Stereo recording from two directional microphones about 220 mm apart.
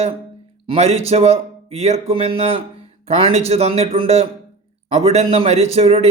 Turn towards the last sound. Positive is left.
turn(degrees=-25)  # may be behind; listen again after turning